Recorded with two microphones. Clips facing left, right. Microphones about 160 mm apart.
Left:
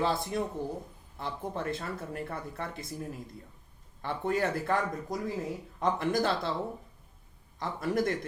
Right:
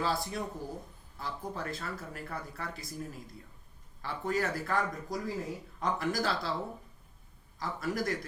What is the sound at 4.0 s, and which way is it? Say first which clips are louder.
Speech: left 3 dB; 25° left (ahead or behind).